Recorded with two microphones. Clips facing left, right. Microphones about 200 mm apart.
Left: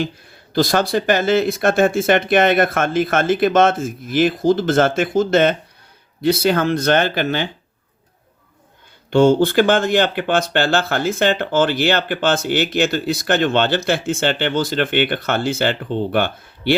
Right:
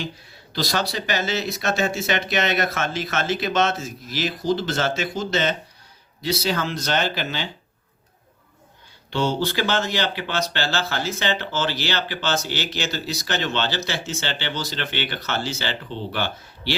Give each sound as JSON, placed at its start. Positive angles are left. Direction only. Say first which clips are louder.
{"t": 0.5, "sound": "speech", "louder": "left 9 dB", "side_deg": 50}
{"t": 9.0, "sound": "speech", "louder": "left 10 dB", "side_deg": 50}